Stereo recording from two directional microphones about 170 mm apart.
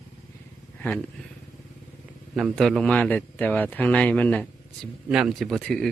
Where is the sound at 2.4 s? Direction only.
Centre (ahead or behind).